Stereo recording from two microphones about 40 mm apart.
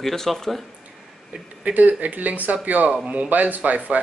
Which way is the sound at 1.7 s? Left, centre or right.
Right.